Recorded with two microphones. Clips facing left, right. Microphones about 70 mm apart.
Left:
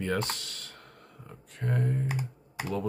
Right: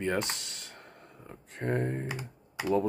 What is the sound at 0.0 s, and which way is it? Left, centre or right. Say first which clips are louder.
Speech: even; right.